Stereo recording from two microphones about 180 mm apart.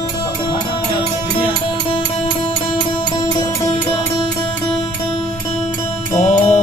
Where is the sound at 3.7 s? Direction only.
30° left (ahead or behind).